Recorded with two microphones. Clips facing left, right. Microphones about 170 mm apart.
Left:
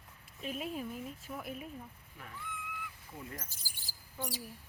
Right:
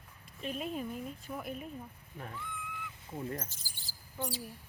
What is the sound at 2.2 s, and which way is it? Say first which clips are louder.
Speech: right 3 dB; 35° right (ahead or behind).